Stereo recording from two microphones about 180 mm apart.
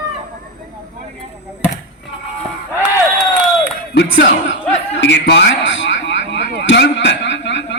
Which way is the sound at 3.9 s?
80° left.